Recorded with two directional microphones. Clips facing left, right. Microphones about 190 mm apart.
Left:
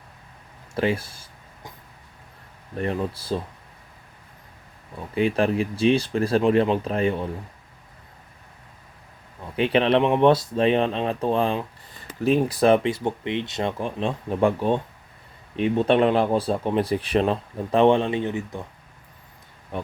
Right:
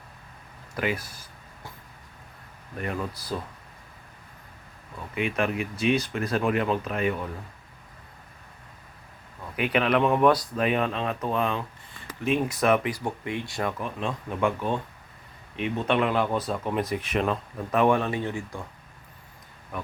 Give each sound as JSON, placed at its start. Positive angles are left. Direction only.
{"t": 0.7, "sound": "speech", "side_deg": 30}
{"t": 2.7, "sound": "speech", "side_deg": 30}
{"t": 5.1, "sound": "speech", "side_deg": 35}
{"t": 9.6, "sound": "speech", "side_deg": 30}
{"t": 19.7, "sound": "speech", "side_deg": 30}